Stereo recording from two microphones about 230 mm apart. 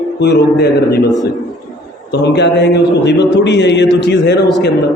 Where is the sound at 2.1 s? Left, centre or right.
Left.